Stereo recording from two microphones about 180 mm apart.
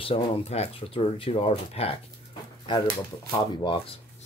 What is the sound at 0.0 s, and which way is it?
Speech, 35° left (ahead or behind).